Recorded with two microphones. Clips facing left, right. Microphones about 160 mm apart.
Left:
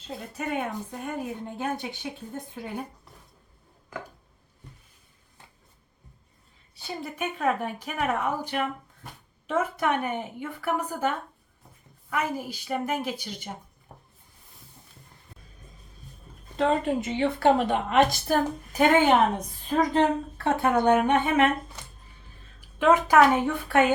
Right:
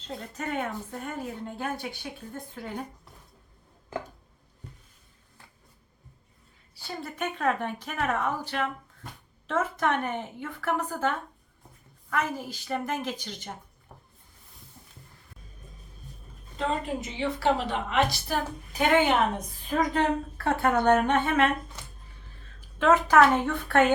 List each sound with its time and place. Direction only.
0.1 s speech: 10° left (ahead or behind)
6.7 s speech: 15° left (ahead or behind)
12.1 s speech: 10° left (ahead or behind)
16.6 s speech: 60° left (ahead or behind)
20.4 s speech: 15° left (ahead or behind)
22.8 s speech: 10° left (ahead or behind)